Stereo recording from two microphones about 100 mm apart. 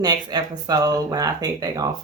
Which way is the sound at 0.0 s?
45° right (ahead or behind).